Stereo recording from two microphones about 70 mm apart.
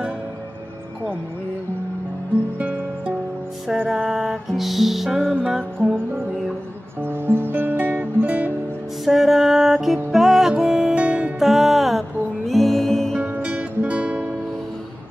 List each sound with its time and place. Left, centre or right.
4.0 s music: centre
5.8 s music: centre
7.0 s music: right
9.0 s music: centre
11.3 s music: centre
13.3 s music: centre